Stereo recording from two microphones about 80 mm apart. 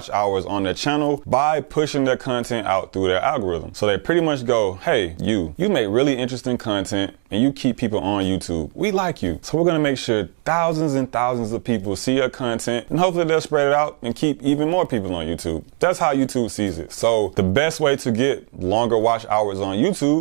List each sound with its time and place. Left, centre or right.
0.1 s speech: centre